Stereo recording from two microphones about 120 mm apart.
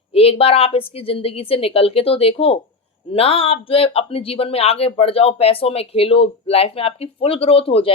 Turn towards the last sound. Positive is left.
turn(degrees=50)  # may be behind; listen again after turning